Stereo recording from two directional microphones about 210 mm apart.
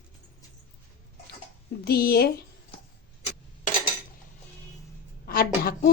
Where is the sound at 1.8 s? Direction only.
45° left (ahead or behind).